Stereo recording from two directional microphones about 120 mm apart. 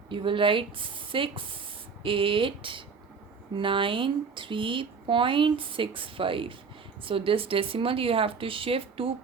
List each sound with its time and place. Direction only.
0.1 s speech: 45° right (ahead or behind)